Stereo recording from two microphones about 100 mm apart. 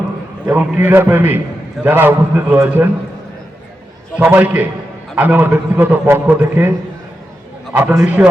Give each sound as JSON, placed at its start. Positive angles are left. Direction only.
{"t": 0.4, "sound": "a man's voice", "side_deg": -20}
{"t": 4.2, "sound": "a man's voice", "side_deg": -20}
{"t": 7.7, "sound": "a man's voice", "side_deg": -15}